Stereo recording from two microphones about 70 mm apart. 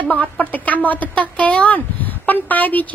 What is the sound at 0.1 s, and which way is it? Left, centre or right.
A woman's voice, left.